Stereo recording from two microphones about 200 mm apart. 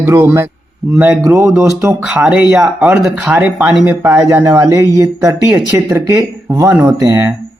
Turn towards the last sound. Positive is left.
turn(degrees=-15)  # may be behind; listen again after turning